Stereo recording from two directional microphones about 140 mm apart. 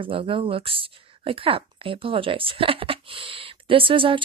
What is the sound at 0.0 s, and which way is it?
A woman's voice, 40° right (ahead or behind).